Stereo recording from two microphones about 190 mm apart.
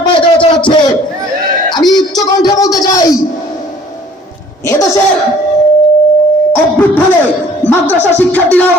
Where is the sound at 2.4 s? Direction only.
20° left (ahead or behind).